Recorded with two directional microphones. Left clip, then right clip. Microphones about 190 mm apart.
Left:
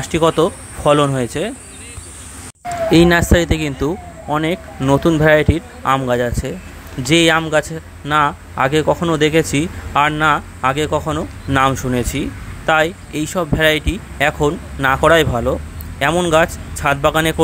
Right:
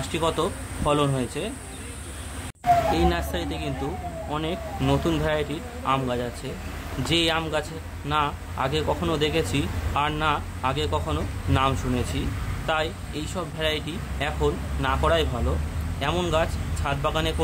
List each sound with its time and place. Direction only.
0.0 s speech: 30° left (ahead or behind)
2.9 s speech: 40° left (ahead or behind)